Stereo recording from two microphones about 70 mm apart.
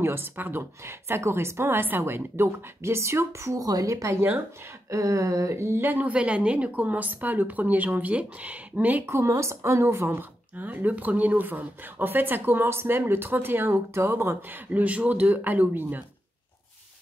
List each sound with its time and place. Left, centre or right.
0.0 s a woman's voice: right
3.6 s a woman's voice: right
4.8 s a woman's voice: right
9.0 s a woman's voice: right
14.7 s a woman's voice: centre